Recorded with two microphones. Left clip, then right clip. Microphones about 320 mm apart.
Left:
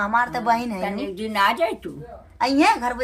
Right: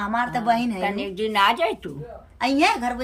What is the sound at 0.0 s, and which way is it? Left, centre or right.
Speech, centre.